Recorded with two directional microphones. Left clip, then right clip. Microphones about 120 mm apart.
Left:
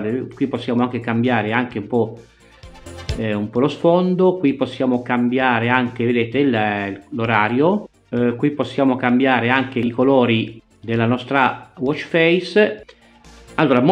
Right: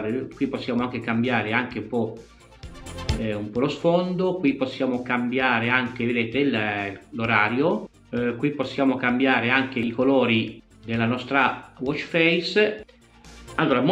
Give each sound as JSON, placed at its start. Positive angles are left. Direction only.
{"t": 0.1, "sound": "speech", "side_deg": 25}
{"t": 3.2, "sound": "speech", "side_deg": 25}